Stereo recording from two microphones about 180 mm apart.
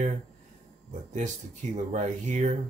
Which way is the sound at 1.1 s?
40° right (ahead or behind).